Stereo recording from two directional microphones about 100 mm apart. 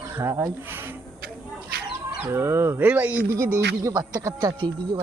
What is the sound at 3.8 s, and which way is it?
Speech, 35° right (ahead or behind).